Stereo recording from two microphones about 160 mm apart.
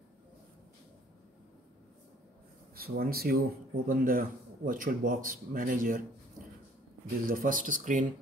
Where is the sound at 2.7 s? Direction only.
70° right (ahead or behind).